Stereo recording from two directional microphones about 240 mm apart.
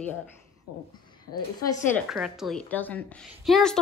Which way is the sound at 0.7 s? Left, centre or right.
Left.